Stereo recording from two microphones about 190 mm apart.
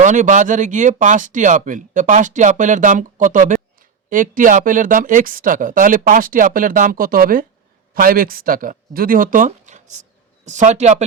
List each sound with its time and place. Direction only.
0.0 s speech: 40° right (ahead or behind)